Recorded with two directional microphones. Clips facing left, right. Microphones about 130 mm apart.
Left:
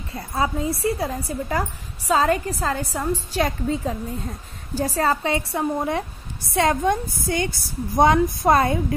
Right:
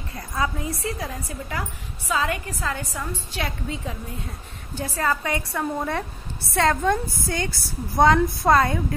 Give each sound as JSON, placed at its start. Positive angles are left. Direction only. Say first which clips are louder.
{"t": 0.1, "sound": "a woman's voice", "louder": "left 3 dB", "side_deg": 30}
{"t": 5.1, "sound": "a woman's voice", "louder": "left 3 dB", "side_deg": 25}